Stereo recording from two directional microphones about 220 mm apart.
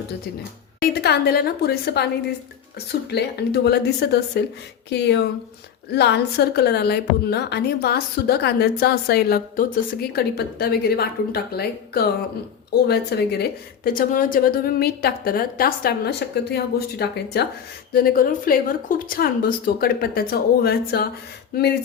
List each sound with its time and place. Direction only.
0.8 s a woman's voice: 45° left (ahead or behind)